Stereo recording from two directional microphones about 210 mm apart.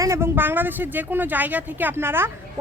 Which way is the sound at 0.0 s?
15° right (ahead or behind).